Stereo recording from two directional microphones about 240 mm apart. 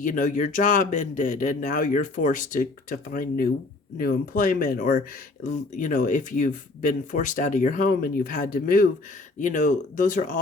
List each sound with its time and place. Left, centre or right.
0.0 s speech: left